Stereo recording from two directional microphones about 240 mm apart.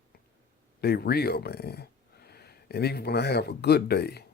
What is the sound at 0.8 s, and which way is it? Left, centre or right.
Speech, left.